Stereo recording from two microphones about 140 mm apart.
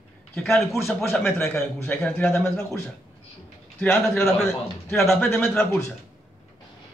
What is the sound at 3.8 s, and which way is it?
Speech, 15° left (ahead or behind).